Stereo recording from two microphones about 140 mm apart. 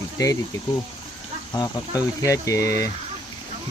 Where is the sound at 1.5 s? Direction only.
25° left (ahead or behind).